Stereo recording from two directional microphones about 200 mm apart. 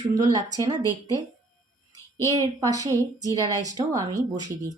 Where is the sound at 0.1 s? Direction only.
20° right (ahead or behind).